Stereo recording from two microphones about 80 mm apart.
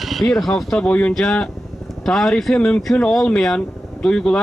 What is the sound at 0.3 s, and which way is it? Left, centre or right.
Speech, centre.